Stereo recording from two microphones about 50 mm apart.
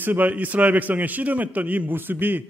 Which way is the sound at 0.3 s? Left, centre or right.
Right.